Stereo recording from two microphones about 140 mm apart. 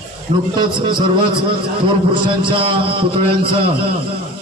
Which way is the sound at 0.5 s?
35° right (ahead or behind).